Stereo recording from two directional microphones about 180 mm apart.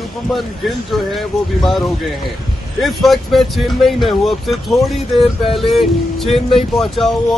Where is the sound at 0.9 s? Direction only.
Centre (ahead or behind).